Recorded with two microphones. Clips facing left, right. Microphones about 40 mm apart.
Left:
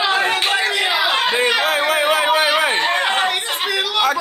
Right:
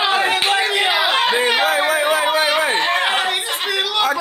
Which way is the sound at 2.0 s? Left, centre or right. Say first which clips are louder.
Left 1 dB; left.